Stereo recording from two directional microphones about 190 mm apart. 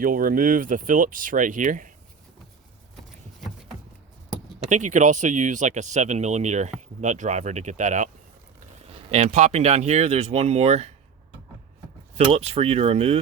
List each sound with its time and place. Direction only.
0.0 s speech: 45° right (ahead or behind)
4.7 s speech: 40° right (ahead or behind)
12.1 s speech: 30° right (ahead or behind)